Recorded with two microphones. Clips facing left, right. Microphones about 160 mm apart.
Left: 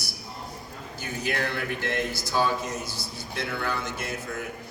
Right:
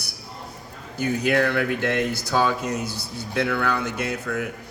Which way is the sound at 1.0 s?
55° right (ahead or behind).